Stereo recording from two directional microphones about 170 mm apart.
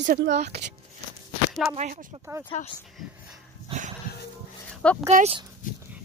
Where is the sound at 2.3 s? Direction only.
20° right (ahead or behind).